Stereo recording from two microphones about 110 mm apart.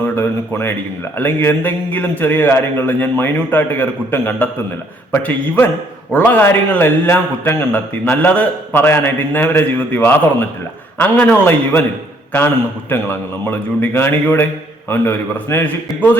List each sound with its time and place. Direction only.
0.0 s a man's voice: 20° left (ahead or behind)
12.9 s a man's voice: 20° left (ahead or behind)